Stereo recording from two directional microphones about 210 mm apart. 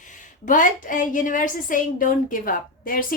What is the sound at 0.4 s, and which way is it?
A woman's voice, 40° left (ahead or behind).